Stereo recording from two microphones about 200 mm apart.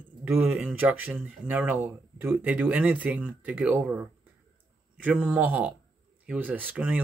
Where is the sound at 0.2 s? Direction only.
10° right (ahead or behind).